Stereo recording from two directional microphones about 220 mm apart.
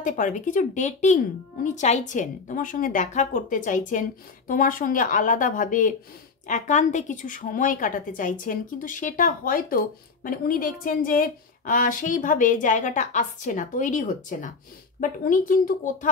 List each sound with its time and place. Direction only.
0.0 s speech: 35° left (ahead or behind)